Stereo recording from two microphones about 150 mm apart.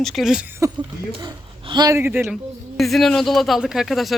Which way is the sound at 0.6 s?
20° right (ahead or behind).